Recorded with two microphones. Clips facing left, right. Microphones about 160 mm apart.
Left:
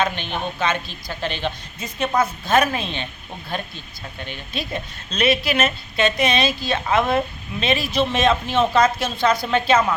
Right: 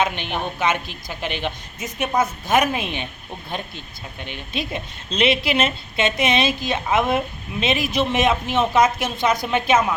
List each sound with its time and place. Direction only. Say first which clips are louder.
0.0 s a woman's voice: even; 15° right (ahead or behind)